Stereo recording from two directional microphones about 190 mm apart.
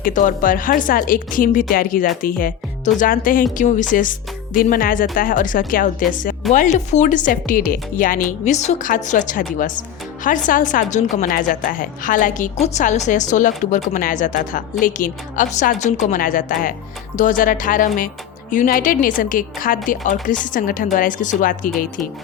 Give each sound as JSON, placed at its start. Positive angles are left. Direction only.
{"t": 0.0, "sound": "a woman's voice", "side_deg": 45}